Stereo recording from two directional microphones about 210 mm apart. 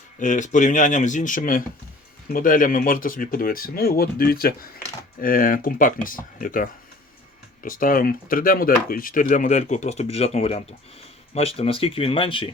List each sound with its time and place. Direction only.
0.2 s speech: 35° left (ahead or behind)